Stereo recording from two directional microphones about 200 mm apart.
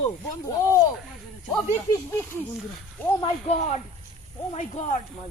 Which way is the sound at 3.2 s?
30° left (ahead or behind).